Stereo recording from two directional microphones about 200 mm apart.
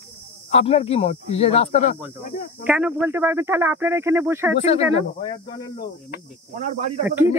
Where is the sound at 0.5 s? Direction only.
30° left (ahead or behind).